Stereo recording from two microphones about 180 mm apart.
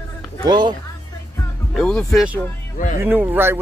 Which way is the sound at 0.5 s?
25° right (ahead or behind).